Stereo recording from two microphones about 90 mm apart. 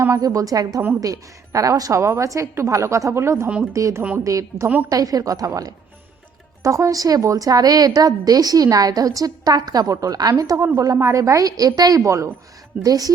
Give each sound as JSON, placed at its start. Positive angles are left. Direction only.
{"t": 0.2, "sound": "a woman's voice", "side_deg": -40}